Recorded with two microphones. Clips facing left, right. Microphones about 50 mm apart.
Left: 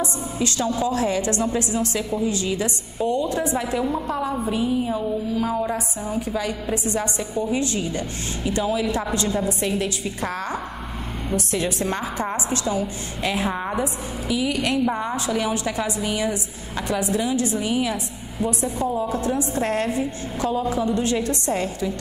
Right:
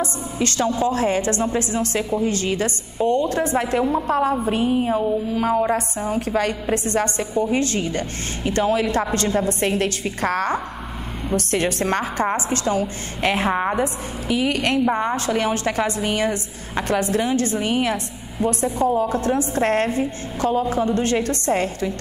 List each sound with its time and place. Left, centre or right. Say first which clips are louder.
0.0 s a woman's voice: right 1 dB; right
6.1 s a woman's voice: right 4 dB; right